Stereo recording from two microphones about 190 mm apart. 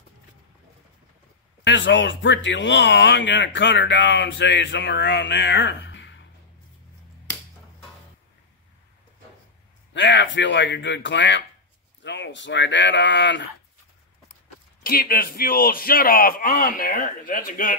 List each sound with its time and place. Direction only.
1.6 s speech: 75° left (ahead or behind)
9.9 s speech: 70° left (ahead or behind)
14.8 s speech: 50° left (ahead or behind)